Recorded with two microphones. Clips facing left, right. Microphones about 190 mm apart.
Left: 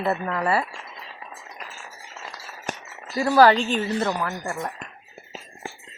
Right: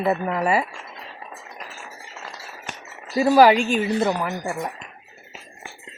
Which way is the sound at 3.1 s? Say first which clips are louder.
Right 2 dB; 15° right (ahead or behind).